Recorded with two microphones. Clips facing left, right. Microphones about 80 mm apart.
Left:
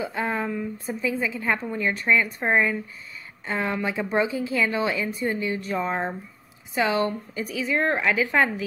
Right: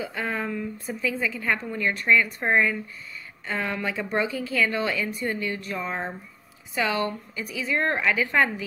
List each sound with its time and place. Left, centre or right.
0.0 s a woman's voice: left
7.6 s a woman's voice: centre